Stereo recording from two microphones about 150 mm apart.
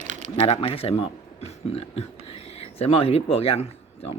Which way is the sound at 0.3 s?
40° left (ahead or behind).